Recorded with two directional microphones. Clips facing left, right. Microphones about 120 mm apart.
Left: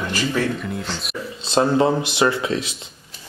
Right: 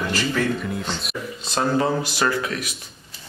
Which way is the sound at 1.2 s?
25° left (ahead or behind).